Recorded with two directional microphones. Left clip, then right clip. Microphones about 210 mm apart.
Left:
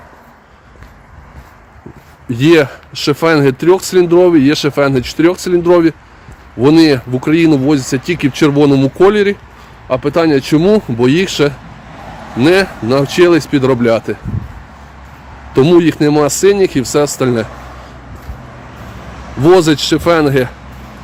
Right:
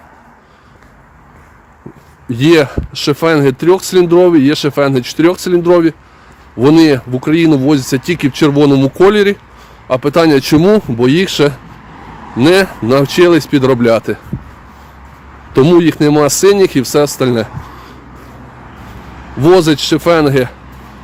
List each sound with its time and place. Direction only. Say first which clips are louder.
2.3 s speech: even; 20° right (ahead or behind)
15.5 s speech: right 1 dB; 20° right (ahead or behind)
19.4 s speech: even; 15° right (ahead or behind)